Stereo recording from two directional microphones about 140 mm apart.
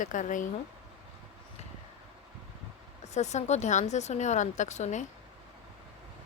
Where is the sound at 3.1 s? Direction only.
55° left (ahead or behind).